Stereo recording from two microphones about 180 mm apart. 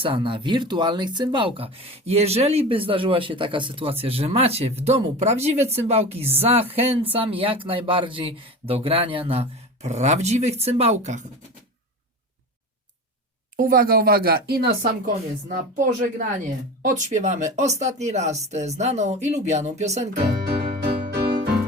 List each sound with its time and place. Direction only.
0.0 s speech: 30° right (ahead or behind)
13.6 s speech: 50° right (ahead or behind)
20.2 s music: 65° right (ahead or behind)